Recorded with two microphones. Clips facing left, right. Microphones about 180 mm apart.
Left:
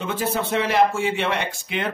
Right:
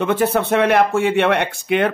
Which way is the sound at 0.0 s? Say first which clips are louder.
Right 7 dB; 60° right (ahead or behind).